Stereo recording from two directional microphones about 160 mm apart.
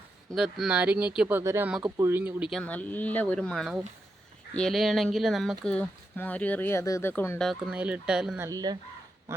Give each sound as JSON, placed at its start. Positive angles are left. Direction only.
{"t": 0.3, "sound": "speech", "side_deg": -5}
{"t": 2.5, "sound": "speech", "side_deg": 5}
{"t": 7.4, "sound": "speech", "side_deg": -5}
{"t": 8.4, "sound": "speech", "side_deg": -20}